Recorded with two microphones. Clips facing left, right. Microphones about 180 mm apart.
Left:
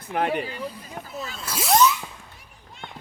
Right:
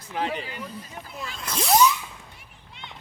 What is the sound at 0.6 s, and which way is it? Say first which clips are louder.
Speech: left 3 dB; 10° left (ahead or behind).